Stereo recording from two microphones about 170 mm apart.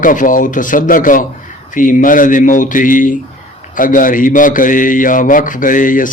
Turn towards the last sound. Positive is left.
turn(degrees=50)  # may be behind; listen again after turning